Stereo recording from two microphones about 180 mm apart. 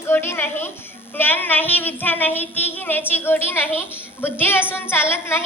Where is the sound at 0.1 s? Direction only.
10° left (ahead or behind).